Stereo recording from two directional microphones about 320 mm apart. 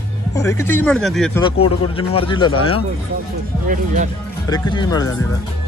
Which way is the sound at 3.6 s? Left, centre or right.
Right.